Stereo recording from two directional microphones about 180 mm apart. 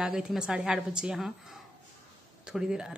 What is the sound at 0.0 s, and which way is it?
A woman's voice, 5° right (ahead or behind).